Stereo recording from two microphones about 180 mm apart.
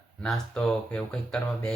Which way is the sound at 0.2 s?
5° left (ahead or behind).